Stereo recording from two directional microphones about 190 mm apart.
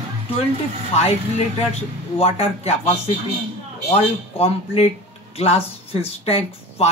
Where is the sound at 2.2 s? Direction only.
35° left (ahead or behind).